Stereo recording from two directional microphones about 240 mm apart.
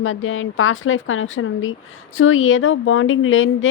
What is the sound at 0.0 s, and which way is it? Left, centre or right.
Speech, left.